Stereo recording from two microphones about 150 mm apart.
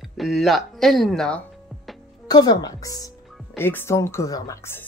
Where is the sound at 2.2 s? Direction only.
25° left (ahead or behind).